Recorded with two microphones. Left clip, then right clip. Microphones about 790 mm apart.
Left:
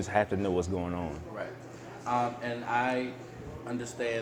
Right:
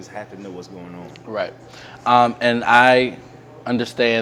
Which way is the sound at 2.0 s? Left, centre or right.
Right.